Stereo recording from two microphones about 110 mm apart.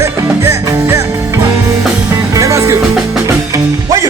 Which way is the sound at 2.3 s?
30° right (ahead or behind).